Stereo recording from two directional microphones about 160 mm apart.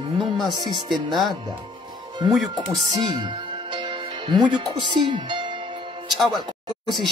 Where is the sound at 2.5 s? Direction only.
30° right (ahead or behind).